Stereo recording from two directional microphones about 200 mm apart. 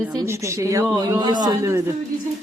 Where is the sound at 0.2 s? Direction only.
15° right (ahead or behind).